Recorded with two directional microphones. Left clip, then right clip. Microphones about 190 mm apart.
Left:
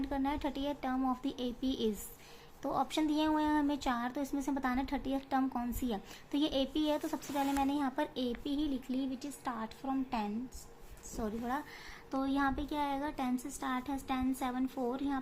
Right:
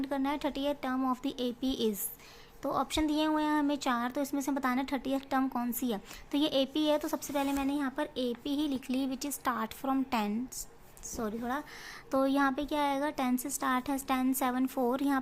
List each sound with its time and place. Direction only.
0.0 s a woman's voice: 20° right (ahead or behind)
8.5 s a woman's voice: 25° right (ahead or behind)
11.1 s a woman's voice: 20° right (ahead or behind); by 15.2 s 40° right (ahead or behind)